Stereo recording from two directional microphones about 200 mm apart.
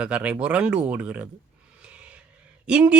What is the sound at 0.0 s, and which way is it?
Speech, 5° right (ahead or behind).